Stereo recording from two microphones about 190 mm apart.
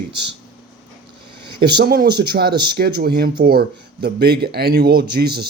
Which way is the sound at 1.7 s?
55° right (ahead or behind).